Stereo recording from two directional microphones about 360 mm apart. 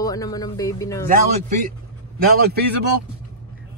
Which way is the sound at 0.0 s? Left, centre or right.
Centre.